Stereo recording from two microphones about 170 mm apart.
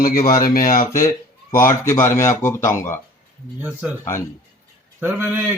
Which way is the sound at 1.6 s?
15° left (ahead or behind).